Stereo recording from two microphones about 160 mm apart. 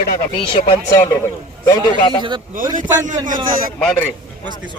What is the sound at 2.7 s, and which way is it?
Speech, 55° right (ahead or behind).